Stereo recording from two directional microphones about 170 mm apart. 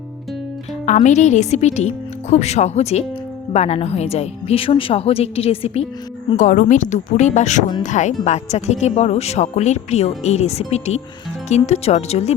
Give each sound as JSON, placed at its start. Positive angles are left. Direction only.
{"t": 0.9, "sound": "speech", "side_deg": 45}
{"t": 6.3, "sound": "speech", "side_deg": 50}